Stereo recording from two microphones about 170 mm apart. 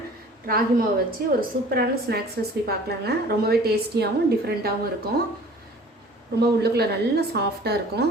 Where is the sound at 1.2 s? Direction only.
60° right (ahead or behind).